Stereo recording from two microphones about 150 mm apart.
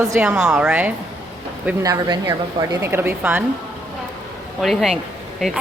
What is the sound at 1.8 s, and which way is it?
A woman's voice, 25° right (ahead or behind).